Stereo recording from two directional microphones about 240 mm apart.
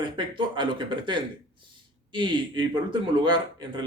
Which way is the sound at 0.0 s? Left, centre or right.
Centre.